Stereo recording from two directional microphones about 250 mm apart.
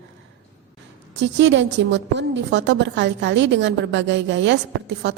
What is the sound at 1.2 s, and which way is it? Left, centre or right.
A woman's voice, right.